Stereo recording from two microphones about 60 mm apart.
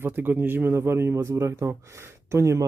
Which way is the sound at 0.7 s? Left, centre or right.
Right.